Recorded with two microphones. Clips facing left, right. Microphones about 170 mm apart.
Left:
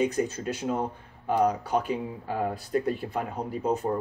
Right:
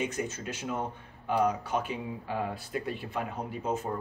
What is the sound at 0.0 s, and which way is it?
Speech, 35° left (ahead or behind).